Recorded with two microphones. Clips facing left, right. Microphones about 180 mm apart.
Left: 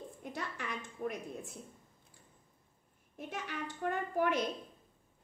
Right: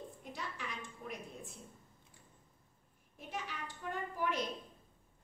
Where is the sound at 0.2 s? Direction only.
55° left (ahead or behind).